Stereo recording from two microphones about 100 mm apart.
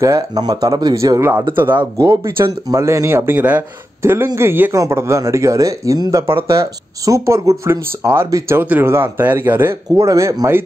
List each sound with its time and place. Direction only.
0.0 s speech: 40° right (ahead or behind)
1.5 s speech: 20° right (ahead or behind)
8.5 s speech: 20° right (ahead or behind)